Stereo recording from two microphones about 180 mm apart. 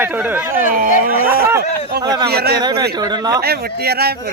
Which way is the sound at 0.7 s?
50° right (ahead or behind).